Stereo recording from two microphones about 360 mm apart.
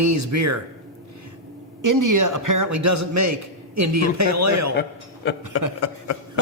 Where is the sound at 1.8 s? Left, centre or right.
Right.